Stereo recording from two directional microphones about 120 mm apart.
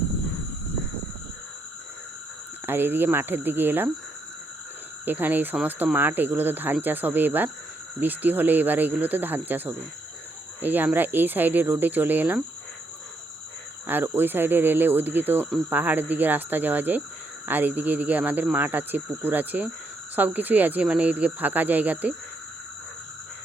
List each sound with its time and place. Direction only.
2.6 s speech: 20° right (ahead or behind)
5.0 s speech: 15° right (ahead or behind)
13.8 s cricket: 15° right (ahead or behind)
14.2 s speech: 15° right (ahead or behind)